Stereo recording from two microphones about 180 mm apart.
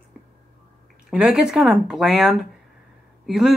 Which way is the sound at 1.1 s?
5° right (ahead or behind).